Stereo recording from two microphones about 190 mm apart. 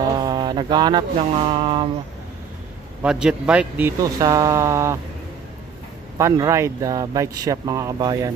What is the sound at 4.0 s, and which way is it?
Speech, 20° right (ahead or behind).